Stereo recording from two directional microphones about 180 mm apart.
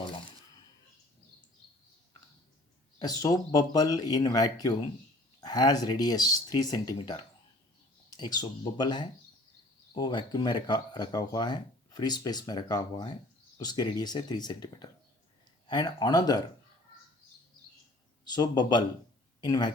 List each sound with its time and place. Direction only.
3.0 s speech: 20° left (ahead or behind)
18.3 s speech: 25° left (ahead or behind)